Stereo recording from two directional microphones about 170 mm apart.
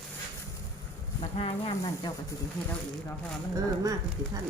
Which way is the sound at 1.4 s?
30° left (ahead or behind).